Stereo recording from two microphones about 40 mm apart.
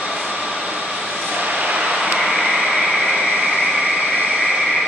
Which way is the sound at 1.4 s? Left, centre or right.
Right.